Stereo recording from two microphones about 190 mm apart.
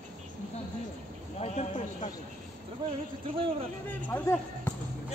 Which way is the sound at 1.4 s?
35° left (ahead or behind).